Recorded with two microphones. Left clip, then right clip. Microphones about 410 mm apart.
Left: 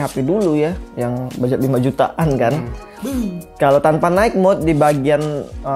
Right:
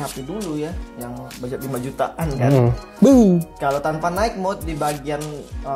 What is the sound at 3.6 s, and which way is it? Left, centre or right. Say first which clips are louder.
Speech: left 8 dB; left.